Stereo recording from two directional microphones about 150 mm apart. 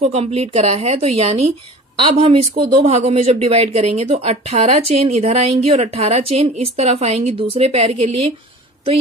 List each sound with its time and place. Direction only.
0.0 s a woman's voice: 45° right (ahead or behind)
2.9 s a woman's voice: 45° right (ahead or behind)